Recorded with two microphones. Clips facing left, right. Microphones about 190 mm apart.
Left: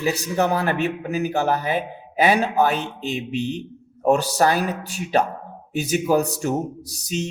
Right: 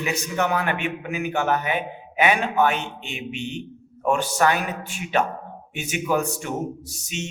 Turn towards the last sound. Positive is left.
turn(degrees=40)  # may be behind; listen again after turning